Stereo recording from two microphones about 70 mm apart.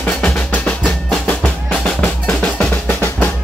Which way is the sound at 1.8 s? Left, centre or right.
Centre.